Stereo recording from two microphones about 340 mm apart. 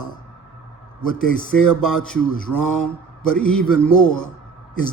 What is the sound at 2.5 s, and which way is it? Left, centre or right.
Speech, centre.